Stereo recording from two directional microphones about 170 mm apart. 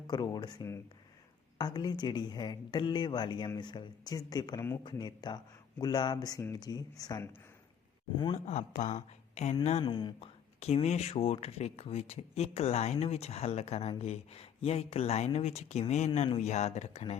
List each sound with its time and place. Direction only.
0.1 s speech: 25° left (ahead or behind)
8.4 s speech: 45° left (ahead or behind)
9.8 s speech: 25° left (ahead or behind)
10.6 s speech: 40° left (ahead or behind)